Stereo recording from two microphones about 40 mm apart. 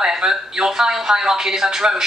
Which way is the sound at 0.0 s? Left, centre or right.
Centre.